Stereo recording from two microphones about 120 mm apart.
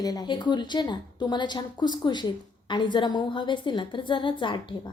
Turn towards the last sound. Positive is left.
turn(degrees=45)  # may be behind; listen again after turning